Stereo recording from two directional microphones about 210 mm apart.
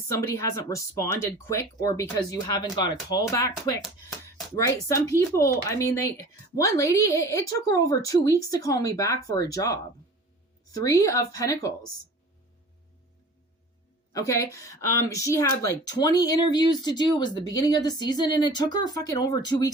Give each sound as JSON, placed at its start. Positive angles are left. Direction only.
{"t": 0.1, "sound": "a woman's voice", "side_deg": 15}
{"t": 14.1, "sound": "a woman's voice", "side_deg": 15}